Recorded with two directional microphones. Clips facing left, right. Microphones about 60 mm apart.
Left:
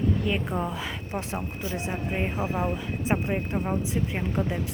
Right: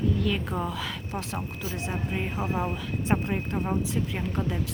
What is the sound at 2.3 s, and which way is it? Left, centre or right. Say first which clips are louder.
Speech: left 1 dB; centre.